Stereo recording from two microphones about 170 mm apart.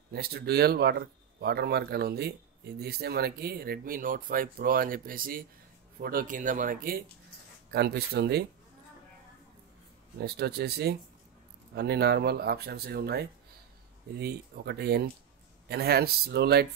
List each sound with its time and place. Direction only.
0.1 s speech: 65° right (ahead or behind)
7.7 s speech: 70° right (ahead or behind)
10.2 s speech: 70° right (ahead or behind)